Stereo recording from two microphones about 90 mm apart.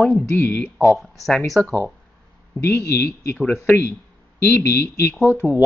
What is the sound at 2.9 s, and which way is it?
Speech, 30° left (ahead or behind).